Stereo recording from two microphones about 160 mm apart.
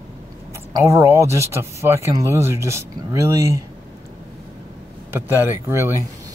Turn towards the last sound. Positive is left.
turn(degrees=-15)  # may be behind; listen again after turning